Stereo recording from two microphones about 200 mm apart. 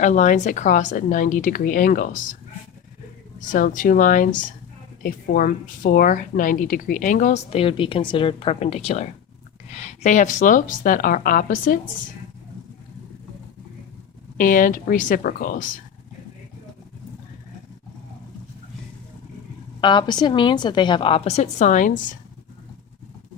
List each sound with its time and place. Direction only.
0.0 s a woman's voice: 40° left (ahead or behind)
3.5 s a woman's voice: 40° left (ahead or behind)
14.3 s a woman's voice: 45° left (ahead or behind)
19.8 s a woman's voice: 25° left (ahead or behind); by 22.2 s 40° left (ahead or behind)